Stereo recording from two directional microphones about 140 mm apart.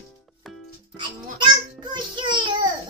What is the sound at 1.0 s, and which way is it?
A child's voice, 35° right (ahead or behind).